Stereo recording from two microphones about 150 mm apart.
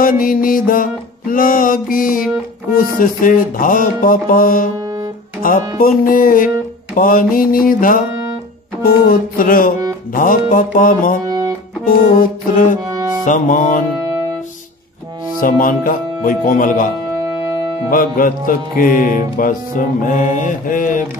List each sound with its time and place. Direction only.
0.0 s music: 65° left (ahead or behind)
5.8 s music: 70° left (ahead or behind)
9.4 s music: 70° left (ahead or behind)
11.2 s music: 25° right (ahead or behind)
11.8 s music: 70° left (ahead or behind)
12.8 s music: 25° right (ahead or behind)
13.2 s music: 60° left (ahead or behind)
15.4 s music: 65° left (ahead or behind)